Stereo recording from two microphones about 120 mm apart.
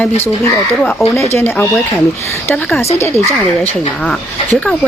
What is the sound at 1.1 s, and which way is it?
Speech, 20° left (ahead or behind).